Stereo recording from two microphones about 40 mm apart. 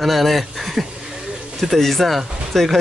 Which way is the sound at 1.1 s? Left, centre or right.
Centre.